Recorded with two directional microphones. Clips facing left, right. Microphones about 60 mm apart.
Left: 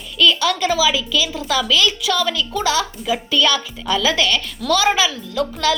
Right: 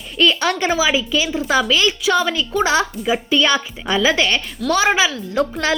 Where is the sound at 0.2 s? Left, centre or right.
Right.